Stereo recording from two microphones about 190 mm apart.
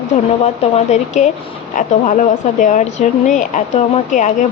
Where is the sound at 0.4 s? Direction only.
35° left (ahead or behind).